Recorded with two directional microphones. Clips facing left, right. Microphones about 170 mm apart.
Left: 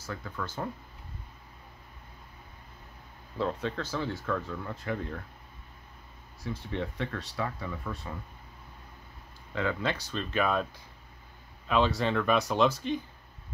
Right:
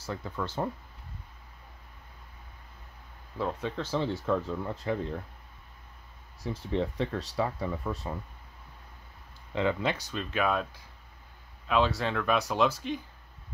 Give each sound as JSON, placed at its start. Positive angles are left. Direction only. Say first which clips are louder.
{"t": 0.0, "sound": "speech", "louder": "right 3 dB", "side_deg": -25}
{"t": 3.3, "sound": "speech", "louder": "left 1 dB", "side_deg": -10}
{"t": 3.8, "sound": "speech", "louder": "right 3 dB", "side_deg": -25}
{"t": 6.4, "sound": "speech", "louder": "right 4 dB", "side_deg": -35}
{"t": 9.5, "sound": "speech", "louder": "right 2 dB", "side_deg": -20}
{"t": 10.3, "sound": "speech", "louder": "even", "side_deg": -5}